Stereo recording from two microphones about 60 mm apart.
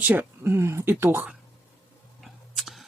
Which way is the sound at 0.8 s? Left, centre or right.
Right.